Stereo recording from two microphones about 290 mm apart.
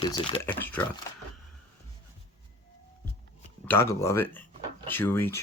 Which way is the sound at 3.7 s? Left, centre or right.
Centre.